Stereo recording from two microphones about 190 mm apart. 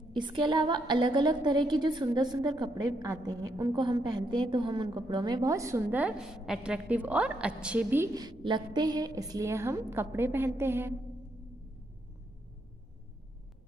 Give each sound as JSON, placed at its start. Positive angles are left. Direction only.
{"t": 0.1, "sound": "a woman's voice", "side_deg": -25}